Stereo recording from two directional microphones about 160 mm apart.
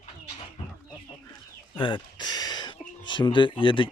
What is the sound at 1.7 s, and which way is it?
Speech, 30° left (ahead or behind).